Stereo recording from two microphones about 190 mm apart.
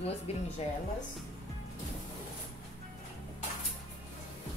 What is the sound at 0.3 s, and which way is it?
Speech, 35° left (ahead or behind).